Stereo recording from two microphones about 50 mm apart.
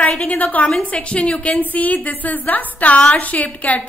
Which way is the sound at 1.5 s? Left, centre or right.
Left.